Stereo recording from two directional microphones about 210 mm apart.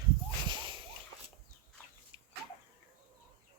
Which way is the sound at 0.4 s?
20° right (ahead or behind).